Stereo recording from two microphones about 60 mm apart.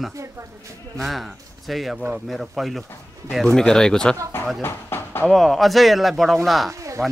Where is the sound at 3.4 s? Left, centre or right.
Centre.